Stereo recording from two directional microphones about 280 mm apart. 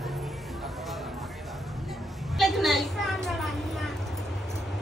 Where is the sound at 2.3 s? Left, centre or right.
Centre.